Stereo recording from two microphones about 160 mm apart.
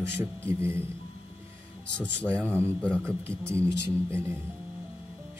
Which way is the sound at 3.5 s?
15° right (ahead or behind).